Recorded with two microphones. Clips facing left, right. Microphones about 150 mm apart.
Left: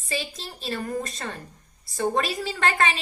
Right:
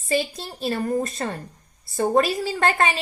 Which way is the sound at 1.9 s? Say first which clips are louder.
Right 5 dB; 40° right (ahead or behind).